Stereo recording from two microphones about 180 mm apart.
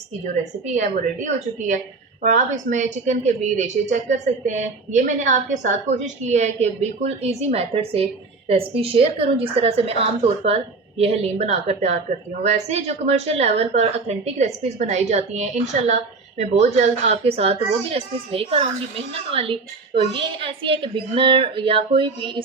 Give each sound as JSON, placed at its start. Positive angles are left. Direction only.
{"t": 0.7, "sound": "a woman's voice", "side_deg": -40}